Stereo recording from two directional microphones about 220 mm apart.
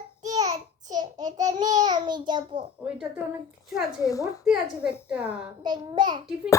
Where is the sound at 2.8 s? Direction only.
5° right (ahead or behind).